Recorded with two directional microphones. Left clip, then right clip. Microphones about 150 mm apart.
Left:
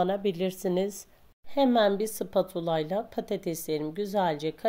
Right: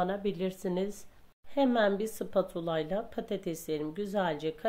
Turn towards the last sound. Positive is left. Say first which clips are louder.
# left 4 dB
turn(degrees=30)  # may be behind; listen again after turning